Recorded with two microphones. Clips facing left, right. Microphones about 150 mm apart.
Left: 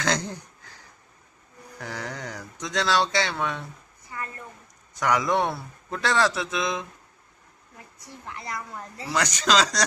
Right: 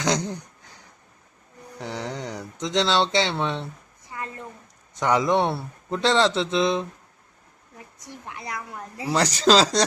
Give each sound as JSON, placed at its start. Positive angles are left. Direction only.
{"t": 0.0, "sound": "a sound", "side_deg": -15}
{"t": 1.8, "sound": "speech", "side_deg": -20}
{"t": 4.1, "sound": "a sound", "side_deg": -20}
{"t": 4.9, "sound": "speech", "side_deg": -25}
{"t": 8.0, "sound": "a woman's voice", "side_deg": -15}
{"t": 9.1, "sound": "speech", "side_deg": -30}